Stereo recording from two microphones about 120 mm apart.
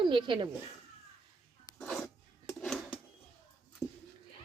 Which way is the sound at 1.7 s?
5° left (ahead or behind).